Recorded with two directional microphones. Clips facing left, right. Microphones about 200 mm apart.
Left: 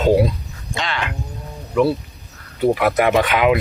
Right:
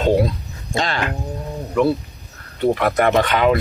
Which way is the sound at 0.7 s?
40° right (ahead or behind).